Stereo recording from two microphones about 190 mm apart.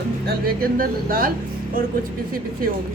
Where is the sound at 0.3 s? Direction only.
50° right (ahead or behind).